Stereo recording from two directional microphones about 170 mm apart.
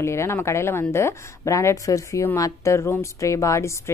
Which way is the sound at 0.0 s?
15° left (ahead or behind).